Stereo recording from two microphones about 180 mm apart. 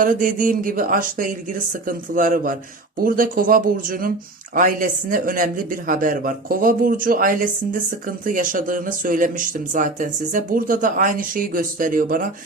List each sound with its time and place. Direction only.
0.0 s speech: 50° right (ahead or behind)